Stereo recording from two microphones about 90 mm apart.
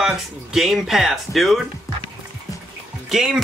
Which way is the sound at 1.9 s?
35° left (ahead or behind).